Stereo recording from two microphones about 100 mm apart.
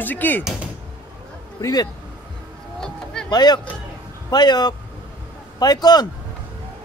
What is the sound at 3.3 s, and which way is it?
Speech, 45° left (ahead or behind).